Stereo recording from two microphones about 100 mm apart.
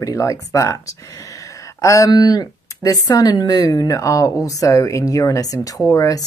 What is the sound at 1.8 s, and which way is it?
Speech, 35° left (ahead or behind).